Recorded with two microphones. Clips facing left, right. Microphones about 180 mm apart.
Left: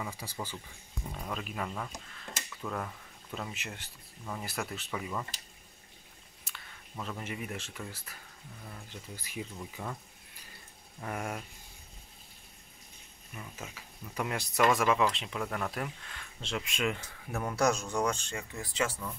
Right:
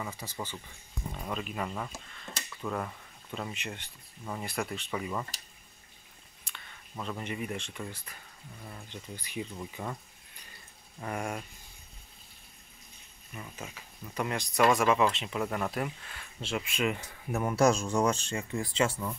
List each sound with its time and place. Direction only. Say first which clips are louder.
0.0 s speech: right 1 dB; 10° left (ahead or behind)
1.1 s speech: right 2 dB; centre (ahead or behind)
6.4 s speech: right 1 dB; 5° left (ahead or behind)
11.0 s speech: right 2 dB; centre (ahead or behind)
13.7 s speech: right 2 dB; 5° left (ahead or behind)
17.3 s speech: right 4 dB; 20° right (ahead or behind)